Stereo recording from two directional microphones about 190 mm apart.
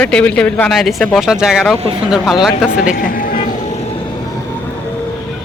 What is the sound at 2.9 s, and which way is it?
Vehicle, 50° left (ahead or behind).